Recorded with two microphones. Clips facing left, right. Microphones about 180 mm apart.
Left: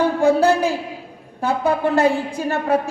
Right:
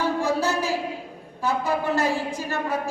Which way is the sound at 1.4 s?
60° left (ahead or behind).